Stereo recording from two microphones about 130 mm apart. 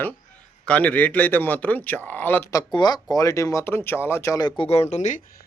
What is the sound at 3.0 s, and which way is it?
A man's voice, 25° left (ahead or behind).